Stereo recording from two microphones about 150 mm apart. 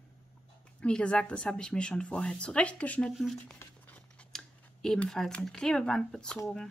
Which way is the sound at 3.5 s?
10° left (ahead or behind).